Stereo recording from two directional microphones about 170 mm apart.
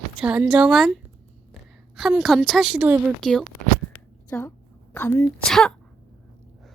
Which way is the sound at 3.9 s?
10° left (ahead or behind).